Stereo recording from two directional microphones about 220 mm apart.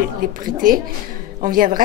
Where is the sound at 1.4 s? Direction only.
40° right (ahead or behind).